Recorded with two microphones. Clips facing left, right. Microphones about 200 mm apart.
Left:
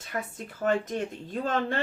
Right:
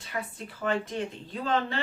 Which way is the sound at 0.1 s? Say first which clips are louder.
Left 2 dB; 45° left (ahead or behind).